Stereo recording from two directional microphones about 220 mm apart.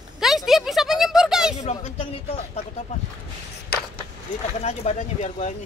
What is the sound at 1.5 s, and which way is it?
Speech, 30° left (ahead or behind).